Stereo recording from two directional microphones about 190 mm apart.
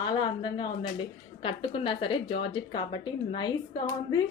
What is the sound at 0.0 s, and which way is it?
A woman's voice, 20° left (ahead or behind).